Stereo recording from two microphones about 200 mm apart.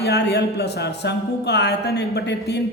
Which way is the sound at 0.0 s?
55° left (ahead or behind).